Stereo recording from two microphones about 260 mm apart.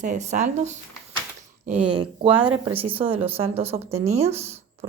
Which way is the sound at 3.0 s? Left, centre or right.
Right.